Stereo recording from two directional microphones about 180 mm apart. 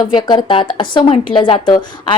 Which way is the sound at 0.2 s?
25° left (ahead or behind).